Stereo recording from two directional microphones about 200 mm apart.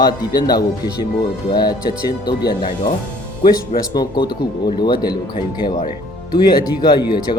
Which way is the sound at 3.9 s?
20° left (ahead or behind).